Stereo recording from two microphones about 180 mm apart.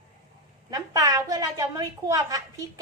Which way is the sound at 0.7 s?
20° right (ahead or behind).